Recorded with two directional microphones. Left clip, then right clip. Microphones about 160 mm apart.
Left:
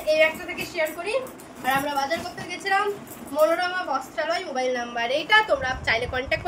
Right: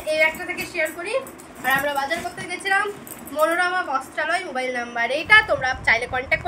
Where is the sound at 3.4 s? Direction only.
15° left (ahead or behind).